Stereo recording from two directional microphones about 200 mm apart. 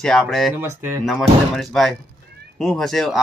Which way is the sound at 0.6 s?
10° right (ahead or behind).